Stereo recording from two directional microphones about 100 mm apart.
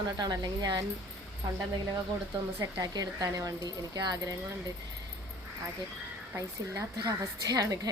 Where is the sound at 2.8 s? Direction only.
45° right (ahead or behind).